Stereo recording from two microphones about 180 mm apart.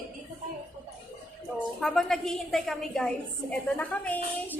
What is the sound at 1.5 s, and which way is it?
A woman's voice, centre (ahead or behind).